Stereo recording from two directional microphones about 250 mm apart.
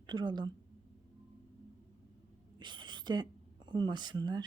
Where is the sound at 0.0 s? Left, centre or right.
Centre.